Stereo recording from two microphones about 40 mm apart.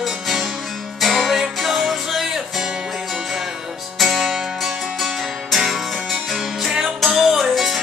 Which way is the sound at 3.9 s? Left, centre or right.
Centre.